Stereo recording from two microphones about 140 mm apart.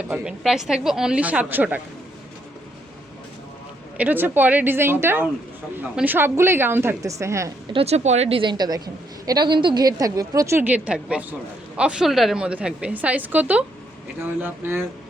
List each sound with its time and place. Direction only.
0.1 s a woman's voice: 5° right (ahead or behind)
3.9 s a woman's voice: 10° right (ahead or behind)
7.7 s a woman's voice: 45° right (ahead or behind); by 14.8 s 15° right (ahead or behind)